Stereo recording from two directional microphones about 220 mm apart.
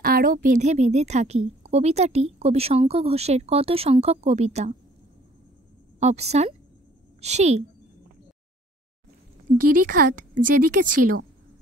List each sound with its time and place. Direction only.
0.0 s a woman's voice: 40° right (ahead or behind)
5.9 s a woman's voice: 30° right (ahead or behind)
9.6 s a woman's voice: 40° right (ahead or behind)